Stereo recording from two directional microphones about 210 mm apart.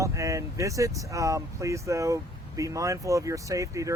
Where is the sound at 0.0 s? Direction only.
15° right (ahead or behind).